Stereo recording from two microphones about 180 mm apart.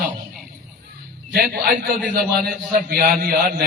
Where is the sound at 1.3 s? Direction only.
60° right (ahead or behind).